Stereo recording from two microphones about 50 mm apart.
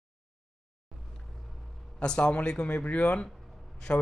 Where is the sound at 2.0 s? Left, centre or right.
Left.